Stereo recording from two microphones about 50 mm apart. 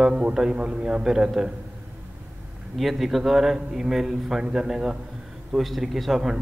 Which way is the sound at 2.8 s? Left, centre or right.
Centre.